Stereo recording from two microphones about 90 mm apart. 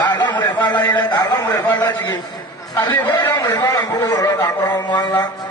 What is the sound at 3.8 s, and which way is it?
Speech, 55° left (ahead or behind).